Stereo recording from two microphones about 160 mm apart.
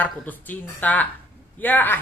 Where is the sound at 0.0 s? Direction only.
10° left (ahead or behind).